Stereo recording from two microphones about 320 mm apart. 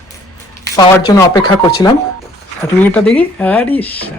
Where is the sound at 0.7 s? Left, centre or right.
Centre.